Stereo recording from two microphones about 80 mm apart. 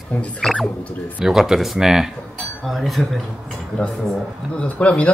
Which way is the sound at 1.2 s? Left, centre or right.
Centre.